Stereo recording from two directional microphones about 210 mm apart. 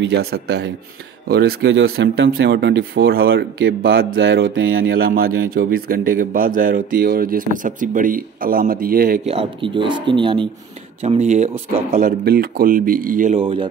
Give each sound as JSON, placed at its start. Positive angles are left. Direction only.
{"t": 0.0, "sound": "a man's voice", "side_deg": -50}
{"t": 4.9, "sound": "a man's voice", "side_deg": -45}
{"t": 9.2, "sound": "speech", "side_deg": -25}
{"t": 12.3, "sound": "a man's voice", "side_deg": -45}
{"t": 13.4, "sound": "speech", "side_deg": -25}